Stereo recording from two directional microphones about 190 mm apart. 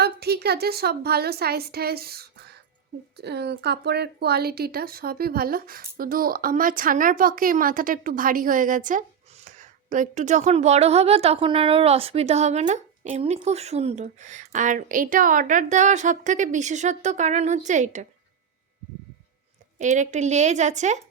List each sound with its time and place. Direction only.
0.0 s a woman's voice: 60° right (ahead or behind); by 18.0 s 40° right (ahead or behind)
19.8 s a woman's voice: 40° right (ahead or behind)